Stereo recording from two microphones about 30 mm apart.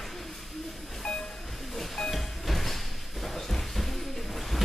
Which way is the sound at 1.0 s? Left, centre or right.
Left.